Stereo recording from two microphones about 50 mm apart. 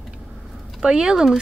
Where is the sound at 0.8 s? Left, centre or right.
Centre.